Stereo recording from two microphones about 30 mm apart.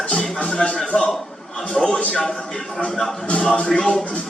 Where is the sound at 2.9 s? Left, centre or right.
Centre.